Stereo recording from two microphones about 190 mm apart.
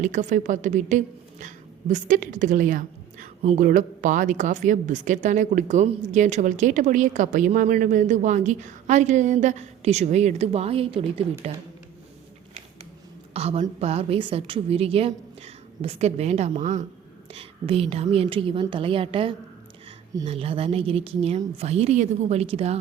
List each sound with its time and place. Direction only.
0.0 s a woman's voice: 40° right (ahead or behind)
13.3 s a woman's voice: 35° right (ahead or behind)